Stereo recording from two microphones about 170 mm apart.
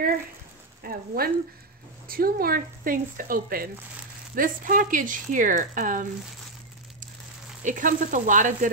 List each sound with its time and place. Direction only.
0.8 s speech: 60° right (ahead or behind)
7.6 s speech: 50° right (ahead or behind)